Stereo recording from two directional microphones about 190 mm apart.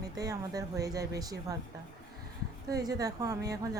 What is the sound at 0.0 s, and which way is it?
Speech, 20° right (ahead or behind).